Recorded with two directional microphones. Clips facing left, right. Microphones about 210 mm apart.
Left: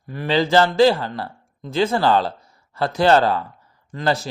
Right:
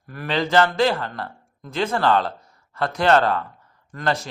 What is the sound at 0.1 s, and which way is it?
A man's voice, 30° left (ahead or behind).